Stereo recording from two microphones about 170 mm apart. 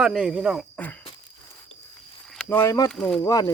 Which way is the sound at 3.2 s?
20° left (ahead or behind).